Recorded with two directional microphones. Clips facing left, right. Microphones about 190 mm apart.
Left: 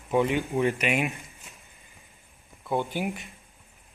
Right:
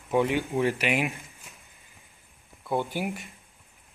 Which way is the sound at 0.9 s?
15° right (ahead or behind).